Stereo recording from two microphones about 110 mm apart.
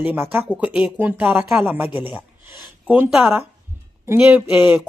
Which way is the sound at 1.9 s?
50° left (ahead or behind).